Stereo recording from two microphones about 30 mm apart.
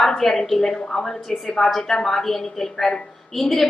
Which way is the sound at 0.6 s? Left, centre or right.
Left.